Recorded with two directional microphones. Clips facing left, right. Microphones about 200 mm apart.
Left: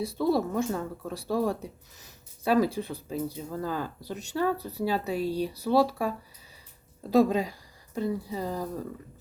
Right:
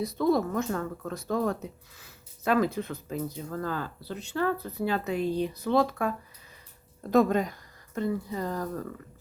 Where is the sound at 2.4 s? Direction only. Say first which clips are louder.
Left 1 dB; 10° left (ahead or behind).